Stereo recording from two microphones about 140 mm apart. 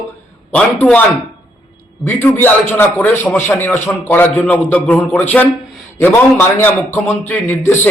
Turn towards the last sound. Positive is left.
turn(degrees=15)  # may be behind; listen again after turning